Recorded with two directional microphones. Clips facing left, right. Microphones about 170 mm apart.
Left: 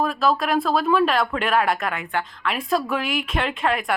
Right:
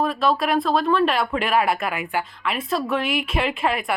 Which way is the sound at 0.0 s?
Centre (ahead or behind).